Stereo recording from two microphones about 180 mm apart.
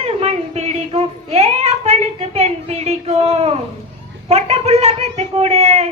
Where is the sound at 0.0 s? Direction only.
35° right (ahead or behind).